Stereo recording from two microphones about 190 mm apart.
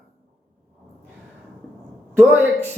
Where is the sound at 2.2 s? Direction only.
10° right (ahead or behind).